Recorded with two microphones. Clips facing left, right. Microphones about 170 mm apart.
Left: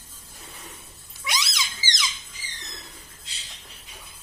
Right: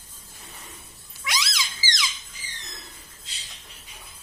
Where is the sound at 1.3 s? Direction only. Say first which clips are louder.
Even; 20° left (ahead or behind).